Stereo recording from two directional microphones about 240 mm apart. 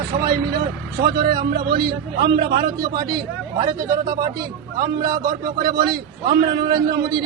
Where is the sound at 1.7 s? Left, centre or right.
Centre.